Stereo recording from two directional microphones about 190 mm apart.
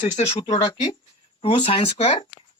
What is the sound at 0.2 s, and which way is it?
Speech, 30° left (ahead or behind).